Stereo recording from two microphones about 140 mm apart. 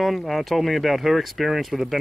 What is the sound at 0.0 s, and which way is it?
Speech, centre (ahead or behind).